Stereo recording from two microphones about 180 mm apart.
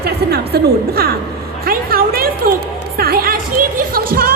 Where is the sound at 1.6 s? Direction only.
55° right (ahead or behind).